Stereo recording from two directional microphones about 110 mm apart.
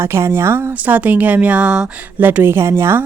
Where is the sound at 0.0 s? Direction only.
25° right (ahead or behind).